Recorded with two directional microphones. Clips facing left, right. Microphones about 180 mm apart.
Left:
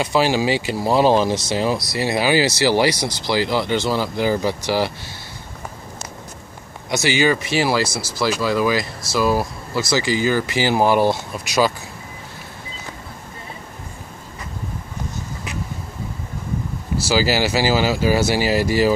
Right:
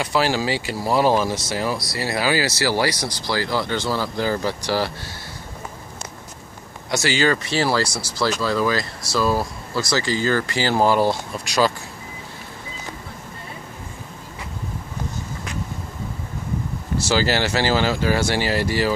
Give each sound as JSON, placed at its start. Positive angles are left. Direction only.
{"t": 0.0, "sound": "speech", "side_deg": 20}
{"t": 6.9, "sound": "speech", "side_deg": 15}
{"t": 17.1, "sound": "speech", "side_deg": 10}